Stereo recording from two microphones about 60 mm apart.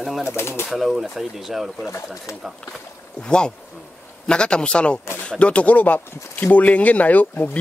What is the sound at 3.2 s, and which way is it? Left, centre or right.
Speech, centre.